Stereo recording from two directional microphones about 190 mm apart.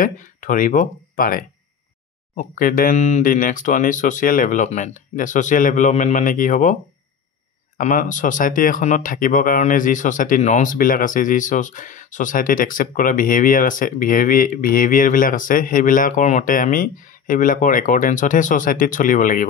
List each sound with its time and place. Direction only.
0.0 s speech: 45° left (ahead or behind)